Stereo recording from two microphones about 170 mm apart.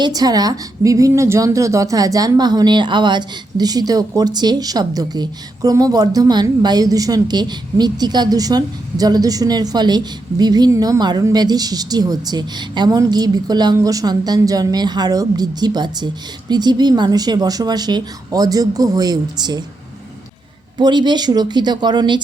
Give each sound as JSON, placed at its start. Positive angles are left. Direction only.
{"t": 0.0, "sound": "a woman's voice", "side_deg": -20}
{"t": 20.7, "sound": "a woman's voice", "side_deg": -25}